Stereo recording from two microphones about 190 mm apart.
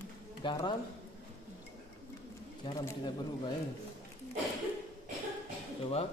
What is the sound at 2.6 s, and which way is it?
Speech, 20° left (ahead or behind).